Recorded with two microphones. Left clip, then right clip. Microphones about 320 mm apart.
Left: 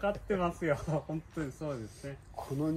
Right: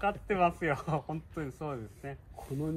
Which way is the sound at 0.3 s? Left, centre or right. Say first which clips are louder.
Right 5 dB; centre.